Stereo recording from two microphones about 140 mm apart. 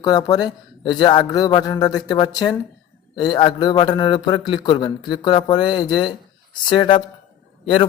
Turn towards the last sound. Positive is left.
turn(degrees=40)  # may be behind; listen again after turning